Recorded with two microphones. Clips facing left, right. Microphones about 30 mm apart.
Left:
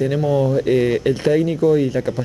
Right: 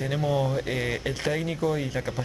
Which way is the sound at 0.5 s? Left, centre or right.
Centre.